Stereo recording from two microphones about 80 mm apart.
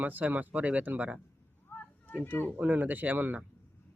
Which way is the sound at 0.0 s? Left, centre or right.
Right.